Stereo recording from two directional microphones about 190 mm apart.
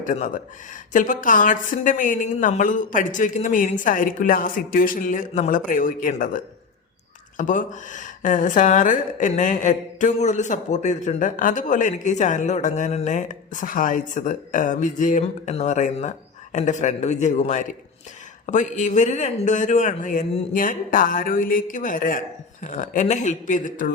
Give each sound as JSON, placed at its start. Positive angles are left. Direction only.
{"t": 0.0, "sound": "a woman's voice", "side_deg": 40}